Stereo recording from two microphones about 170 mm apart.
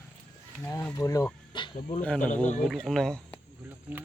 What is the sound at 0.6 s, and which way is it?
Speech, 15° left (ahead or behind).